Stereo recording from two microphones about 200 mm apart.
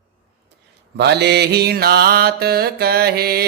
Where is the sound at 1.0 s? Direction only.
55° right (ahead or behind).